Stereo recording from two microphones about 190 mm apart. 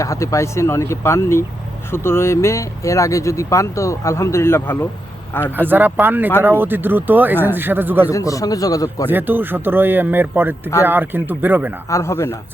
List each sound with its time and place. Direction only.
0.0 s speech: 15° left (ahead or behind)
5.6 s speech: 10° right (ahead or behind)
8.1 s speech: 15° left (ahead or behind)
9.0 s speech: 10° right (ahead or behind)
11.9 s speech: 15° left (ahead or behind)